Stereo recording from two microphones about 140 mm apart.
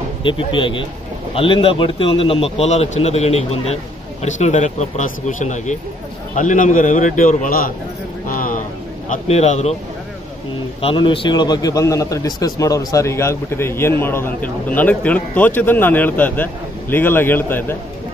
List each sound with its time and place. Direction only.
0.2 s a man's voice: 35° left (ahead or behind); by 7.7 s 80° left
8.3 s a sound: 75° left (ahead or behind)
9.1 s a man's voice: 55° left (ahead or behind)
10.8 s a man's voice: 40° left (ahead or behind); by 17.7 s 15° left (ahead or behind)